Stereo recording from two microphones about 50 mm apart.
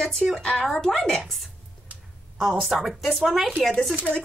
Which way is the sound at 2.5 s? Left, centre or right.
Centre.